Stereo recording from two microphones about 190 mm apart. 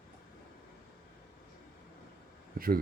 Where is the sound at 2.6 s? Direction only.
50° right (ahead or behind).